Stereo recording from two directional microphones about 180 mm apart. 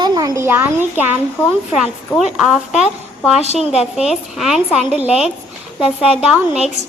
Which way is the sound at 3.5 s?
35° left (ahead or behind).